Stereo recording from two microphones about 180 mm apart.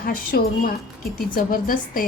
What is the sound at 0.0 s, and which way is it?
A woman's voice, 55° left (ahead or behind).